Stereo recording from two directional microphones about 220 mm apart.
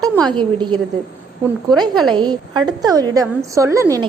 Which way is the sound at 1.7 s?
20° right (ahead or behind).